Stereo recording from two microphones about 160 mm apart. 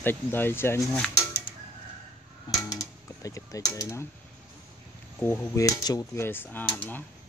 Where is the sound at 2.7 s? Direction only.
20° left (ahead or behind).